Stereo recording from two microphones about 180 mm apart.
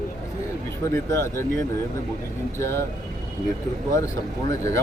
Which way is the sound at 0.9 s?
15° left (ahead or behind).